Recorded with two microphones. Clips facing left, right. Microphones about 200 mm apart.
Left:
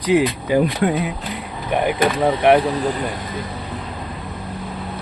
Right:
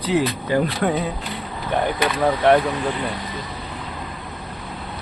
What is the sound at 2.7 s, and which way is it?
Speech, 40° left (ahead or behind).